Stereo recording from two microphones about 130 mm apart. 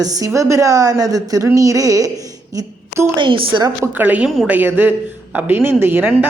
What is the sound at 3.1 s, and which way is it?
Speech, 35° right (ahead or behind).